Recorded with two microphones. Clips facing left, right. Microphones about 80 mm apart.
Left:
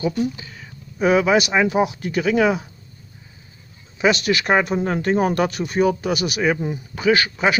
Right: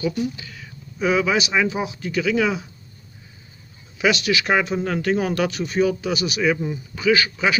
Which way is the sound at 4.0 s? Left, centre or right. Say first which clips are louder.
Left 2 dB; left.